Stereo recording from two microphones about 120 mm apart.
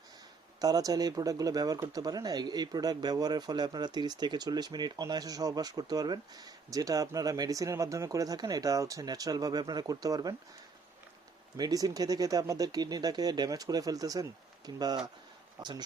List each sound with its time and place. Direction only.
0.6 s speech: 30° right (ahead or behind)
11.5 s speech: 30° right (ahead or behind)